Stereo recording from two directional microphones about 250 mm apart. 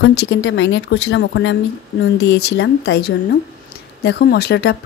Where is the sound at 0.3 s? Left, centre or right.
Left.